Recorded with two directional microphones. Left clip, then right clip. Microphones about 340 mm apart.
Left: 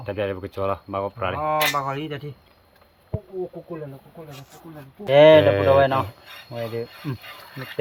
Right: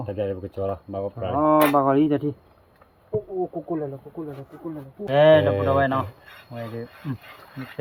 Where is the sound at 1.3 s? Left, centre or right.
Right.